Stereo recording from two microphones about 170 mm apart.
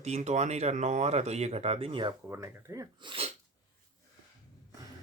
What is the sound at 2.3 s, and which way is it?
Speech, 15° right (ahead or behind).